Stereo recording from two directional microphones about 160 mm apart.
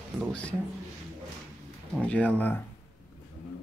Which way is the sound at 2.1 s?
10° left (ahead or behind).